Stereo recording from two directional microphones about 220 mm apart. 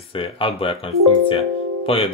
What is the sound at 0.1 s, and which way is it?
Speech, 25° left (ahead or behind).